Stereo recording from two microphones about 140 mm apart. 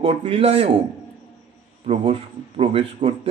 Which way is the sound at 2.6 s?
45° right (ahead or behind).